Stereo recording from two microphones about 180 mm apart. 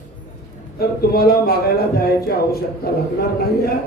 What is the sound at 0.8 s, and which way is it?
Speech, 60° left (ahead or behind).